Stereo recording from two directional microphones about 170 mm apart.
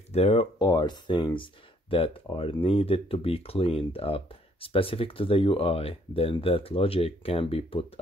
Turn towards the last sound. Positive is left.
turn(degrees=35)  # may be behind; listen again after turning